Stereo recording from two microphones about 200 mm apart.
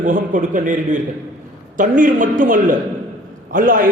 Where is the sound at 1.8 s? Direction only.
40° right (ahead or behind).